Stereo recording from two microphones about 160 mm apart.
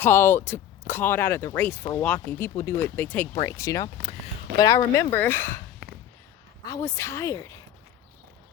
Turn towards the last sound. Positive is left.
turn(degrees=20)  # may be behind; listen again after turning